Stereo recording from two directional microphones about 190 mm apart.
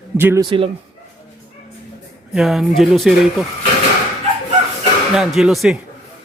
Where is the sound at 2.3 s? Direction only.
Centre (ahead or behind).